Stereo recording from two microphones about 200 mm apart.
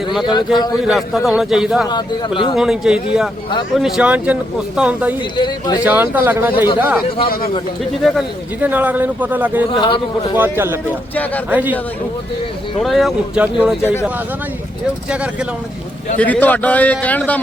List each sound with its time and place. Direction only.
0.3 s a man's voice: 20° left (ahead or behind)
0.9 s a man's voice: centre (ahead or behind)
1.9 s a man's voice: 25° left (ahead or behind)
2.6 s a man's voice: centre (ahead or behind)
5.4 s a man's voice: 20° left (ahead or behind)
5.8 s speech: 10° right (ahead or behind)
8.6 s speech: 10° right (ahead or behind)
9.6 s a man's voice: 25° left (ahead or behind)
10.3 s speech: 10° right (ahead or behind)
11.1 s a man's voice: 10° left (ahead or behind)
11.5 s speech: 10° right (ahead or behind)
12.8 s a man's voice: centre (ahead or behind)
15.1 s a man's voice: 5° right (ahead or behind)
16.1 s a man's voice: 5° left (ahead or behind)